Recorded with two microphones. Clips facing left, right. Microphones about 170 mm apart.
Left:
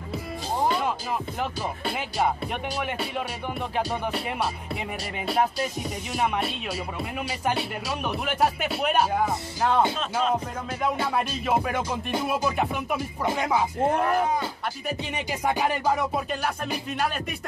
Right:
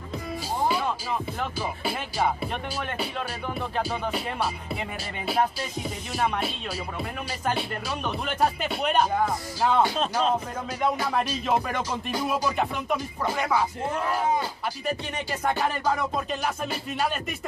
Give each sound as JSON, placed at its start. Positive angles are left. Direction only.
{"t": 1.9, "sound": "speech", "side_deg": 0}
{"t": 5.2, "sound": "speech", "side_deg": 0}
{"t": 7.5, "sound": "speech", "side_deg": 5}
{"t": 9.6, "sound": "speech", "side_deg": -5}
{"t": 11.1, "sound": "speech", "side_deg": 5}
{"t": 13.2, "sound": "speech", "side_deg": 20}
{"t": 13.8, "sound": "speech", "side_deg": 55}
{"t": 14.9, "sound": "music", "side_deg": 10}